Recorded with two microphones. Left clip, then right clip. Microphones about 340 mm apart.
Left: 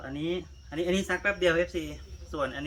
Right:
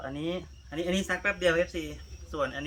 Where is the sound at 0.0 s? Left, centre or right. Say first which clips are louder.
Left 1 dB; centre.